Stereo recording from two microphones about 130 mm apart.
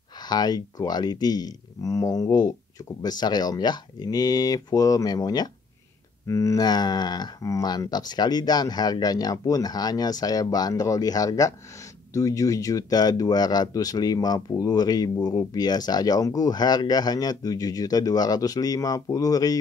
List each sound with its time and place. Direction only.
0.2 s speech: 30° left (ahead or behind)